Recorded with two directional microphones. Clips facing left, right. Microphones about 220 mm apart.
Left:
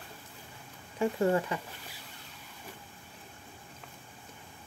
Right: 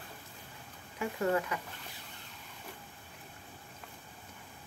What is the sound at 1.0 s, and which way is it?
Speech, 30° left (ahead or behind).